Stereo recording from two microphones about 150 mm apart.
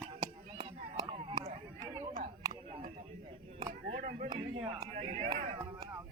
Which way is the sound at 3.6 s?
45° right (ahead or behind).